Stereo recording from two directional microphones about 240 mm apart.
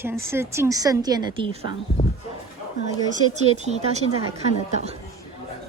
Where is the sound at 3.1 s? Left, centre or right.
Right.